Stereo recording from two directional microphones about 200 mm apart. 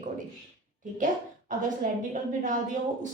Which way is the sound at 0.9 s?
40° right (ahead or behind).